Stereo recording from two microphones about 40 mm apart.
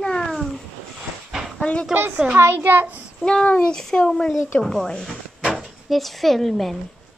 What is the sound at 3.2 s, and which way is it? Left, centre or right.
Speech, centre.